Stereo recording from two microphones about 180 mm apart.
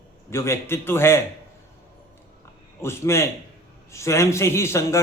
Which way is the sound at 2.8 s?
15° left (ahead or behind).